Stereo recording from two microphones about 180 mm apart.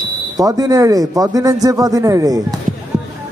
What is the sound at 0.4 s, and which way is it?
A man's voice, 20° right (ahead or behind).